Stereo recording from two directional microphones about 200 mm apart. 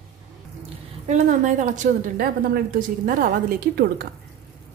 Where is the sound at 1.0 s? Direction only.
35° right (ahead or behind).